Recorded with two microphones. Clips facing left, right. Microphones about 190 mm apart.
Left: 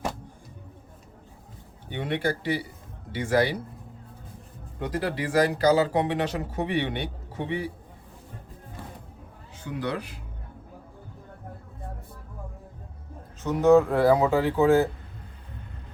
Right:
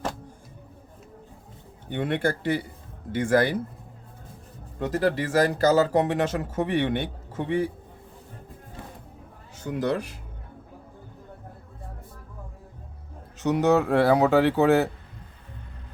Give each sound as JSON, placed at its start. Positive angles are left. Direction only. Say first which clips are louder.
{"t": 1.9, "sound": "speech", "louder": "right 2 dB", "side_deg": -50}
{"t": 4.9, "sound": "speech", "louder": "right 4 dB", "side_deg": -45}
{"t": 9.6, "sound": "speech", "louder": "right 4 dB", "side_deg": -45}
{"t": 13.4, "sound": "speech", "louder": "left 2 dB", "side_deg": -75}